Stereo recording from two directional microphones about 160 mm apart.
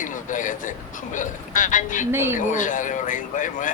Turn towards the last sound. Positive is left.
turn(degrees=55)  # may be behind; listen again after turning